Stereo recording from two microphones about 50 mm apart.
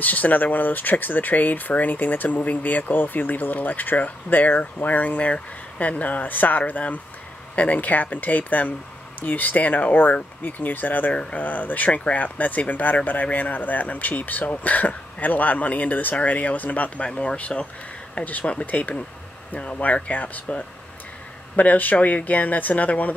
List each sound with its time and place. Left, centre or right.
0.0 s speech: left
17.1 s speech: centre
18.1 s speech: left